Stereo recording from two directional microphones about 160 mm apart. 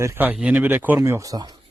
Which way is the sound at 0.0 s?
15° right (ahead or behind).